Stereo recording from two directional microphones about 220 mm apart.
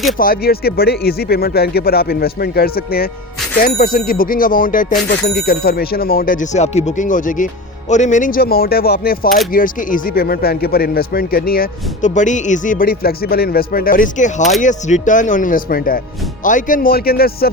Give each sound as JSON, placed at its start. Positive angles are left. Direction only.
{"t": 0.2, "sound": "speech", "side_deg": 45}